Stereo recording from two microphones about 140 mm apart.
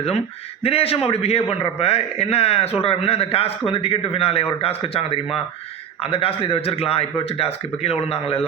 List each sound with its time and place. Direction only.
0.6 s a man's voice: 45° left (ahead or behind)